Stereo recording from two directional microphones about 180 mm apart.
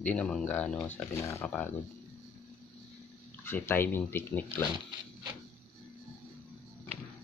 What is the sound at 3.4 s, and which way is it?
Speech, 10° left (ahead or behind).